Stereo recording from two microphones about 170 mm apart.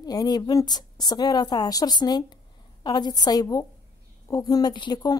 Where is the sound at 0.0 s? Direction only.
25° left (ahead or behind).